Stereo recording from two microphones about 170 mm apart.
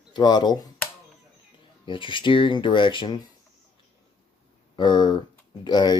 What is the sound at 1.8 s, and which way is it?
Speech, 30° left (ahead or behind).